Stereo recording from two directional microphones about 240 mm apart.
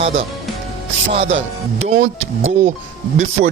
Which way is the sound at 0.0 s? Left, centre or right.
Right.